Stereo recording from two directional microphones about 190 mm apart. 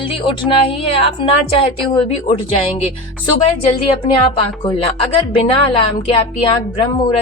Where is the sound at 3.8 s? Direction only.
30° left (ahead or behind).